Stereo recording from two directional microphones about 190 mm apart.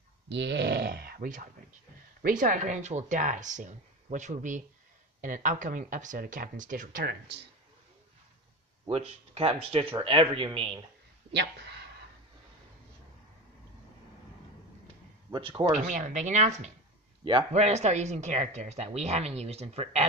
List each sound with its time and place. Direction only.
0.3 s speech: 65° right (ahead or behind)
8.8 s speech: 30° right (ahead or behind)
11.3 s speech: 65° right (ahead or behind)
15.3 s speech: 25° right (ahead or behind)
15.9 s speech: 40° right (ahead or behind)
17.2 s speech: 25° right (ahead or behind)